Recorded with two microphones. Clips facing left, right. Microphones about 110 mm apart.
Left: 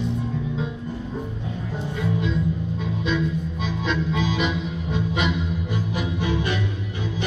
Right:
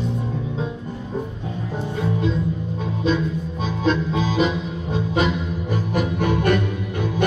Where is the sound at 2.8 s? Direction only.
40° right (ahead or behind); by 6.6 s 55° right (ahead or behind).